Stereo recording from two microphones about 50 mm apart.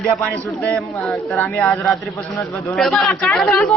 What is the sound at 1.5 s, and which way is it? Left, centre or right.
Speech, left.